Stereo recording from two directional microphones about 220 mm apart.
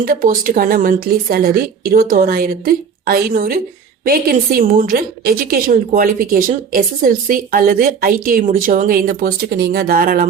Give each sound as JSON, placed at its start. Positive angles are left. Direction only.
{"t": 0.0, "sound": "a woman's voice", "side_deg": -40}